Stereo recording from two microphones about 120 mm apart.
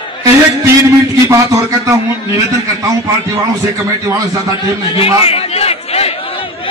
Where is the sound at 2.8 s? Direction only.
30° right (ahead or behind).